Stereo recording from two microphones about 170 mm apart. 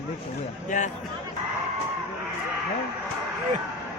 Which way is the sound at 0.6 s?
50° left (ahead or behind).